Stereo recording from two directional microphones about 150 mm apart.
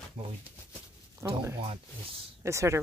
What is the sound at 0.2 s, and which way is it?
Speech, 40° right (ahead or behind).